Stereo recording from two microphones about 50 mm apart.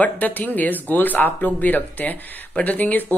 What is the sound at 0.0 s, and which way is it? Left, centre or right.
Speech, left.